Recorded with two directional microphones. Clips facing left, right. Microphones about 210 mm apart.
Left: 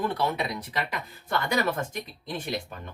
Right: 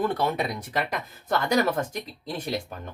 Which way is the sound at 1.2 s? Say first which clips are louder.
Right 4 dB; 40° right (ahead or behind).